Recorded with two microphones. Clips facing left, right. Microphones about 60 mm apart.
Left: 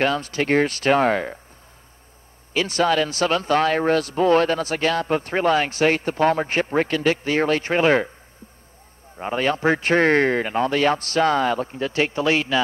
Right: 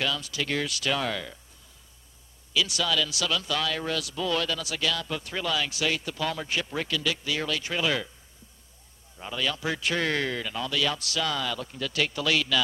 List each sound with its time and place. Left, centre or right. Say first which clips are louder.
0.0 s speech: left 9 dB; left
2.5 s speech: left 7 dB; left
9.1 s speech: left 9 dB; left